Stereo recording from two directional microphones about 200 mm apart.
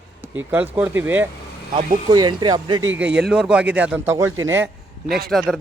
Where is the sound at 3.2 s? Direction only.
5° right (ahead or behind).